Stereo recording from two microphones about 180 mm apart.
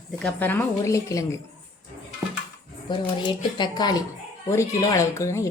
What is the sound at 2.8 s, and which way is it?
Speech, 25° left (ahead or behind).